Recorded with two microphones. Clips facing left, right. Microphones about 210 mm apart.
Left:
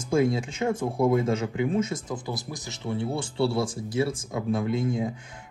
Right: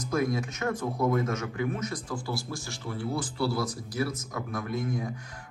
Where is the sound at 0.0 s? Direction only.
25° left (ahead or behind).